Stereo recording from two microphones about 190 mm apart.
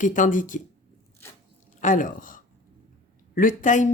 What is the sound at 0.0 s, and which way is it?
Speech, 45° left (ahead or behind).